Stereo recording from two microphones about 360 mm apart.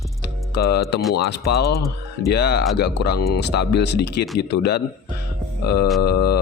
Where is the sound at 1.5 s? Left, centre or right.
Left.